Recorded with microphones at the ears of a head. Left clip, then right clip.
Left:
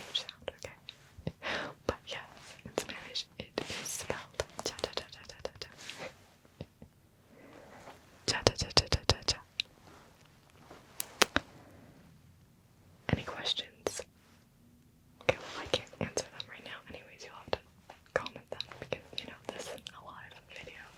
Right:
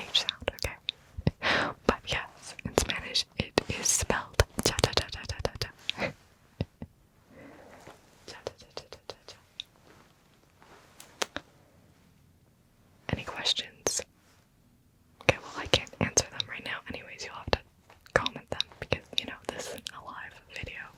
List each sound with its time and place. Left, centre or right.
0.0 s whispering: right
8.2 s whispering: left
10.9 s a sound: left
13.4 s whispering: right
15.7 s whispering: right